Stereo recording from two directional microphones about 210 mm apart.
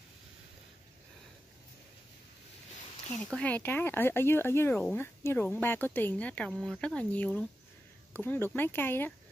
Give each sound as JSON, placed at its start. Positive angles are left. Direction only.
{"t": 3.3, "sound": "speech", "side_deg": 5}